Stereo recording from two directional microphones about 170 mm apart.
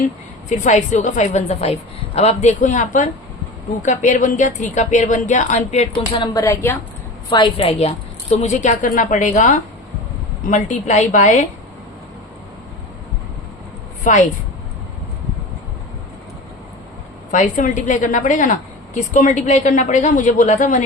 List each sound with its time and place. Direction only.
0.4 s a woman's voice: 45° left (ahead or behind)
5.9 s a woman's voice: 25° left (ahead or behind)
7.3 s a woman's voice: 25° left (ahead or behind); by 11.4 s 45° left (ahead or behind)
14.0 s a woman's voice: 45° left (ahead or behind)
17.3 s a woman's voice: 45° left (ahead or behind)